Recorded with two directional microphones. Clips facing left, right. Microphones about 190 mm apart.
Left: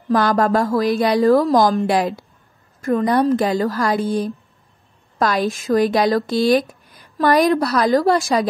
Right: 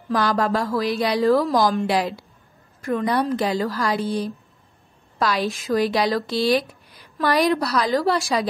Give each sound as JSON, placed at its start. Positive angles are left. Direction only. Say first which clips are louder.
{"t": 0.1, "sound": "speech", "louder": "left 5 dB", "side_deg": 50}